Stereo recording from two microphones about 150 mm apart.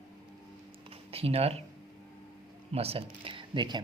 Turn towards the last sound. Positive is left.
turn(degrees=-30)  # may be behind; listen again after turning